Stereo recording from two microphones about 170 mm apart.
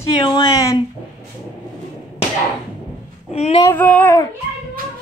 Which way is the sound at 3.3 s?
40° left (ahead or behind).